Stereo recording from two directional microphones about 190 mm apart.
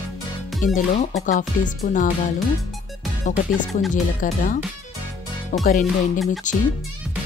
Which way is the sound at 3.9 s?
45° left (ahead or behind).